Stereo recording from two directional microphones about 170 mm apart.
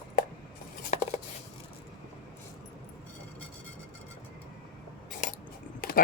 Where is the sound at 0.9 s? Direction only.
40° left (ahead or behind).